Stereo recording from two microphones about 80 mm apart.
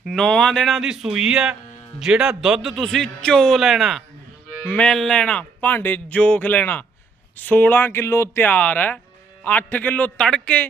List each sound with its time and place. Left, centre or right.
0.2 s a man's voice: centre
0.8 s a man's voice: centre
4.6 s speech: left
4.9 s speech: centre